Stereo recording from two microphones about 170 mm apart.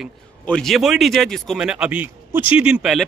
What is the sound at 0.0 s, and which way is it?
Speech, 5° left (ahead or behind).